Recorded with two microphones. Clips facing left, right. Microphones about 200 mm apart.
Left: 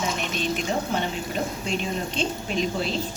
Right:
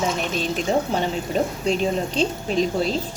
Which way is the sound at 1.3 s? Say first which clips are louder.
Right 8 dB; 40° right (ahead or behind).